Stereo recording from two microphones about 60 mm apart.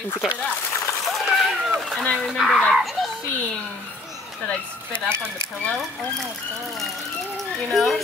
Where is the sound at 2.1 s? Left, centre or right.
Centre.